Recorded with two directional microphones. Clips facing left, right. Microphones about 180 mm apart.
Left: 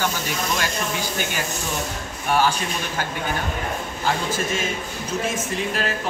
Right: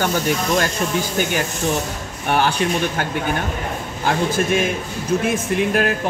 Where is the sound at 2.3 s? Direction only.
60° right (ahead or behind).